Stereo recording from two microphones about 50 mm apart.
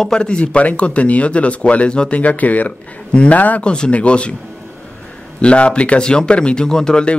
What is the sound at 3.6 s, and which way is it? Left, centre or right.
Speech, centre.